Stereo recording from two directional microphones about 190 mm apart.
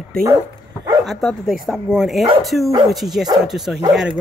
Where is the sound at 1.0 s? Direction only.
Centre (ahead or behind).